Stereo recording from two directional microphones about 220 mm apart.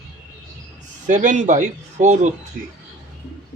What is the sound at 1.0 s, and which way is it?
Speech, 35° right (ahead or behind).